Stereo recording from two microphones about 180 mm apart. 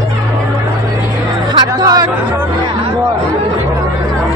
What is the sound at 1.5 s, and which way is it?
Music, 20° right (ahead or behind).